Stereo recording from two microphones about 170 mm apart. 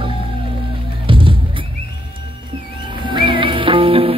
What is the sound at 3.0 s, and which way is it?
Music, 30° right (ahead or behind).